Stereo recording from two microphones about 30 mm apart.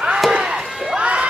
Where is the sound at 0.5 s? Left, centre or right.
Centre.